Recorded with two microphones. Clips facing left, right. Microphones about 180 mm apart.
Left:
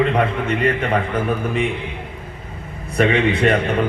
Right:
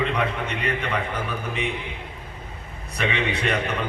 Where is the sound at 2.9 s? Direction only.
50° left (ahead or behind).